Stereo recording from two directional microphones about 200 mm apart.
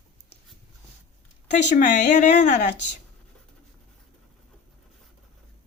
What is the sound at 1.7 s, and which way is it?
Speech, 40° left (ahead or behind).